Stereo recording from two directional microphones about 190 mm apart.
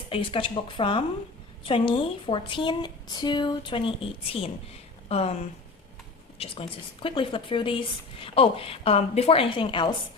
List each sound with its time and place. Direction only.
0.1 s a woman's voice: 25° left (ahead or behind)
6.4 s a woman's voice: 30° left (ahead or behind)